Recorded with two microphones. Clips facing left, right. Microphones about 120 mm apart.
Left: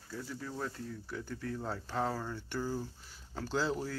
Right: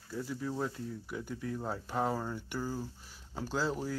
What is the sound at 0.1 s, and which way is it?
Speech, 10° right (ahead or behind).